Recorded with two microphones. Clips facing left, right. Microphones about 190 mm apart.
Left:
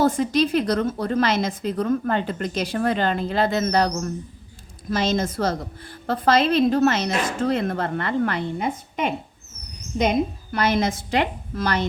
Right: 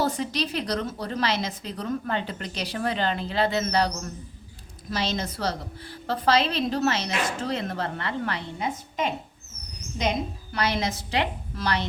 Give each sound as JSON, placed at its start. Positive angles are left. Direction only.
{"t": 0.0, "sound": "a woman's voice", "side_deg": 50}